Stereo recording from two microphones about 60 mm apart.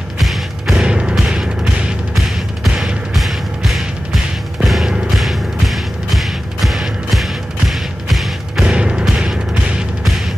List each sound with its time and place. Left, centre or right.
0.2 s music: centre
0.8 s music: centre
8.6 s music: centre